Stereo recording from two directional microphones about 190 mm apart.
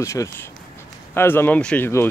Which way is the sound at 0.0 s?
15° left (ahead or behind).